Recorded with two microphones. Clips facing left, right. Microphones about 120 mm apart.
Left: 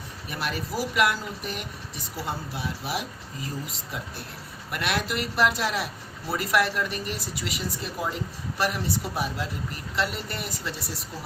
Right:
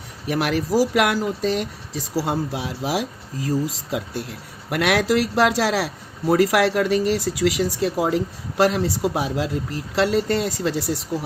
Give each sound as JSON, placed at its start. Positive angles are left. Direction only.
{"t": 0.3, "sound": "a man's voice", "side_deg": -85}